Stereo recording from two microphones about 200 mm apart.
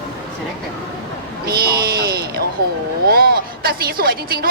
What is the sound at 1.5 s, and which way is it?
A woman's voice, 50° right (ahead or behind).